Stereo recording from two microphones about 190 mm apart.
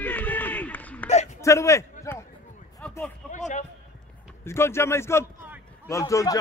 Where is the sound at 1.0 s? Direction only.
35° left (ahead or behind).